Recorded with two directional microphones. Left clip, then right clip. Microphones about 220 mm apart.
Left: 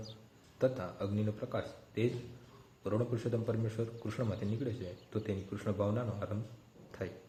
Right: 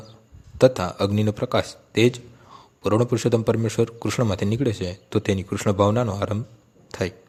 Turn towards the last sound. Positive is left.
turn(degrees=-45)  # may be behind; listen again after turning